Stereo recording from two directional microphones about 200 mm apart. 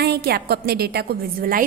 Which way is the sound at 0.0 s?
55° right (ahead or behind).